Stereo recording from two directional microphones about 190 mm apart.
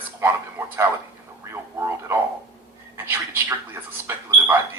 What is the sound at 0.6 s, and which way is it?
Speech, 10° right (ahead or behind).